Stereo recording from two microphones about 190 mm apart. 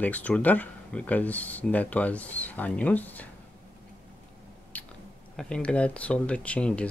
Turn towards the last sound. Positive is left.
turn(degrees=5)  # may be behind; listen again after turning